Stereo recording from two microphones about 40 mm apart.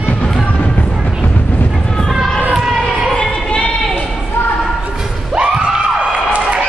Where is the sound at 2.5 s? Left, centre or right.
Centre.